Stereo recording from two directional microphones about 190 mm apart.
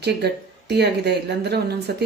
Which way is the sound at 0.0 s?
60° right (ahead or behind).